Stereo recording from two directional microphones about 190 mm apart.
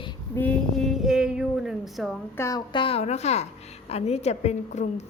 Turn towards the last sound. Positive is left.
turn(degrees=35)  # may be behind; listen again after turning